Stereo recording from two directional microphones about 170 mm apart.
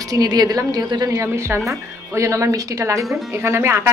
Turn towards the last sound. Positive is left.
turn(degrees=-15)  # may be behind; listen again after turning